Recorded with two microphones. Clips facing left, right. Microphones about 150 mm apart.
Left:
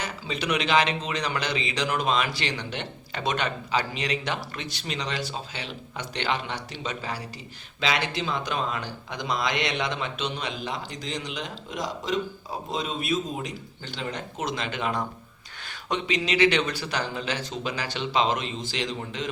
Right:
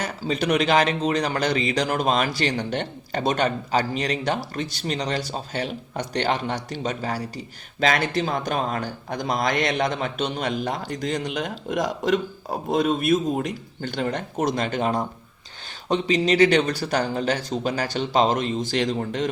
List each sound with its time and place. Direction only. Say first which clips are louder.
0.0 s a man's voice: right 6 dB; 45° right (ahead or behind)